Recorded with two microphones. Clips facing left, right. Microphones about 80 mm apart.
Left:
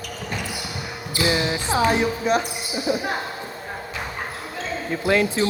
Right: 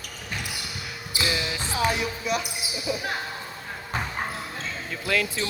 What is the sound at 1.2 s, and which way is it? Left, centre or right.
Basketball bounce, left.